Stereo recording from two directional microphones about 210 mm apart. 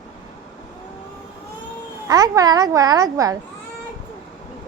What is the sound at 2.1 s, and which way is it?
A child's voice, 20° right (ahead or behind).